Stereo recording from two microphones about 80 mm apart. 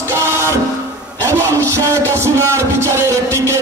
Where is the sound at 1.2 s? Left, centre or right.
Right.